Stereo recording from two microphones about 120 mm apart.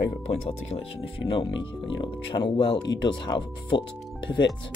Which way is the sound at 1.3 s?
45° left (ahead or behind).